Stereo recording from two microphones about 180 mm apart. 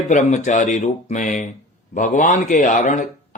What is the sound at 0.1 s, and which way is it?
Speech, 40° left (ahead or behind).